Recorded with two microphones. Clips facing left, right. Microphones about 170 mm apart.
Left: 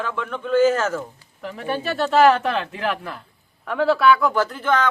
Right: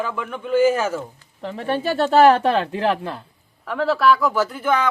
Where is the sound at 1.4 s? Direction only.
30° right (ahead or behind).